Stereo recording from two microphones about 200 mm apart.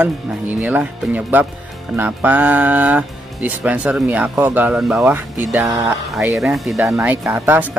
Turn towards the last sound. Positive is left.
turn(degrees=-10)  # may be behind; listen again after turning